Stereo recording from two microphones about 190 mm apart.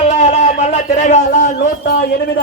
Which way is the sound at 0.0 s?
35° left (ahead or behind).